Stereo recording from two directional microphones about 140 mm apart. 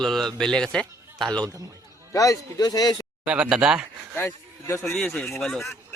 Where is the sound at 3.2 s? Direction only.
5° right (ahead or behind).